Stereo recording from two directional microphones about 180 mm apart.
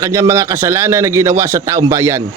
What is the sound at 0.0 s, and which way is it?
A man's voice, 15° right (ahead or behind).